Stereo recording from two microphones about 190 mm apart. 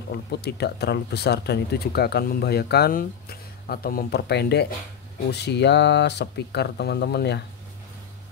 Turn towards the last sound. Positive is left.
turn(degrees=60)  # may be behind; listen again after turning